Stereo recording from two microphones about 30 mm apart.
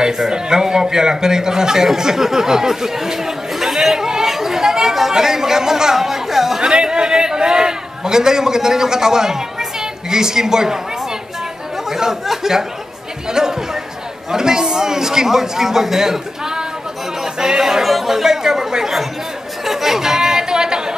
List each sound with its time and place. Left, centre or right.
0.0 s speech: right
2.0 s chatter: centre
5.1 s speech: centre
6.7 s a man's voice: right
11.9 s a man's voice: centre
19.6 s chatter: centre; by 20.9 s right